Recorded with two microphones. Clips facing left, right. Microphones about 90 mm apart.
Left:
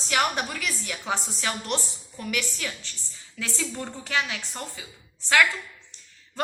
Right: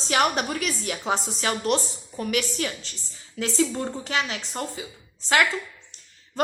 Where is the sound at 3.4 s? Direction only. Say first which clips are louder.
Right 8 dB; 25° right (ahead or behind).